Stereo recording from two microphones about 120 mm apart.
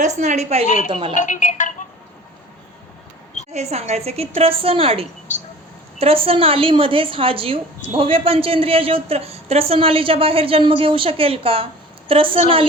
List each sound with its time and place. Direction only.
0.2 s a woman's voice: 70° right (ahead or behind)
0.9 s a woman's voice: 45° right (ahead or behind)
1.1 s speech: 90° left
3.5 s a woman's voice: 65° right (ahead or behind)
5.3 s speech: 90° left
6.0 s a woman's voice: 50° right (ahead or behind)